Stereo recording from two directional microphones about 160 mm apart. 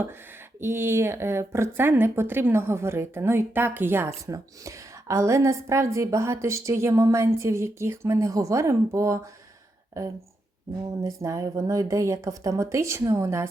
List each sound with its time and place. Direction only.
0.6 s a woman's voice: 15° right (ahead or behind)